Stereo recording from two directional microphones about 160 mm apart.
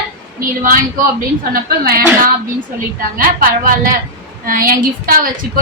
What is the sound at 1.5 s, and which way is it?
Speech, 65° right (ahead or behind).